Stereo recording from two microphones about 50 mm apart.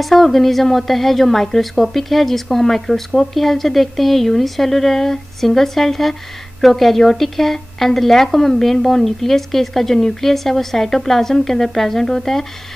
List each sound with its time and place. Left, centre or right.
0.0 s a woman's voice: centre